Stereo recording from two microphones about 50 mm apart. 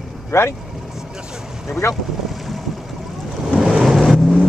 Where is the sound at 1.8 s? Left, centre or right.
Left.